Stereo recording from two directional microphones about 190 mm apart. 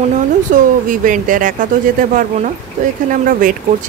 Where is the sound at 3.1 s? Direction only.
45° right (ahead or behind).